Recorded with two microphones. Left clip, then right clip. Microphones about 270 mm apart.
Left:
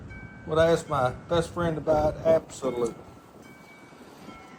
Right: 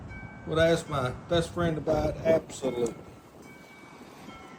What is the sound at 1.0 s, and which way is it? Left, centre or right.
Speech, centre.